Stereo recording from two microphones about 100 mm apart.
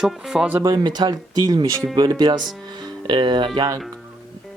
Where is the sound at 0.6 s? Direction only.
40° right (ahead or behind).